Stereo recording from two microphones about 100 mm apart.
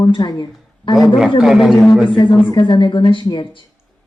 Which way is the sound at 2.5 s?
50° left (ahead or behind).